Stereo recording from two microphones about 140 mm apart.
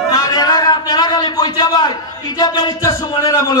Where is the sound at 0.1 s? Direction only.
30° left (ahead or behind).